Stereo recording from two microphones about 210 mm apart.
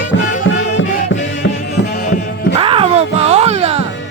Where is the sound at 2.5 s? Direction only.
25° right (ahead or behind).